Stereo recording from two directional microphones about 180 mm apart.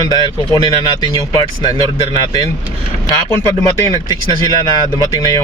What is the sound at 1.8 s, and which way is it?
Speech, 30° right (ahead or behind).